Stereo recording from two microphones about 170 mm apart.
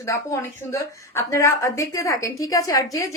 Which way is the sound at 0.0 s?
15° left (ahead or behind).